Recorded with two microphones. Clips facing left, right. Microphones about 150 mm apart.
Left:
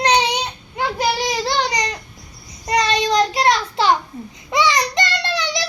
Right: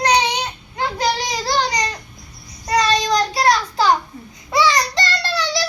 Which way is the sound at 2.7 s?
25° left (ahead or behind).